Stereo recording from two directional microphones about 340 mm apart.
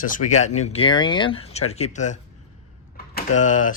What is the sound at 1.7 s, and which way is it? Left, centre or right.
Cutlery, centre.